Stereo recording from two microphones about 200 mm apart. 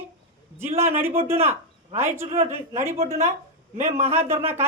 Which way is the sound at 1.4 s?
10° right (ahead or behind).